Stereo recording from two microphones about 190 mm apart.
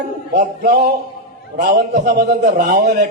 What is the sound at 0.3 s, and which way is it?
A man's voice, 50° right (ahead or behind).